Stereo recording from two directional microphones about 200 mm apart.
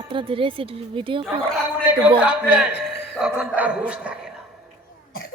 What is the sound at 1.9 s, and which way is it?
A man's voice, 5° right (ahead or behind).